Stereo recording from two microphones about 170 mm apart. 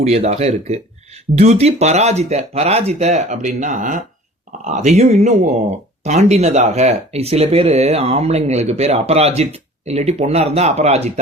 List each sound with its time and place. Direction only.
0.0 s speech: 40° right (ahead or behind)